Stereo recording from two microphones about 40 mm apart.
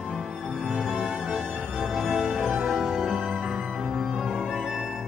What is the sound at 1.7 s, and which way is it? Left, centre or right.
Music, centre.